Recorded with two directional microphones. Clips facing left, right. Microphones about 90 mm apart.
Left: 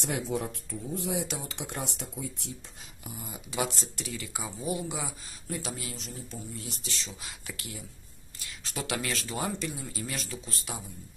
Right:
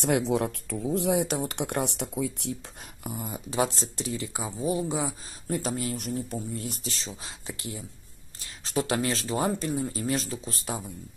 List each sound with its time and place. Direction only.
0.0 s speech: 70° right (ahead or behind)
1.2 s speech: 50° right (ahead or behind); by 2.5 s 75° right (ahead or behind)
3.0 s speech: 50° right (ahead or behind)
3.3 s speech: 35° right (ahead or behind)